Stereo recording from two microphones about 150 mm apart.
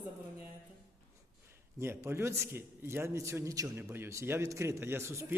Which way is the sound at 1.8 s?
15° right (ahead or behind).